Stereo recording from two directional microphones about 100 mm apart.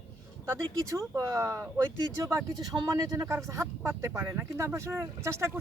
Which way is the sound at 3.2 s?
30° right (ahead or behind).